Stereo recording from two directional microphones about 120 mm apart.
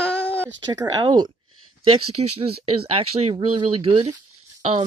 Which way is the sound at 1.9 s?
55° right (ahead or behind).